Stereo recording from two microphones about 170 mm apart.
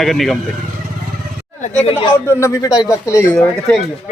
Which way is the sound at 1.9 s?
30° left (ahead or behind).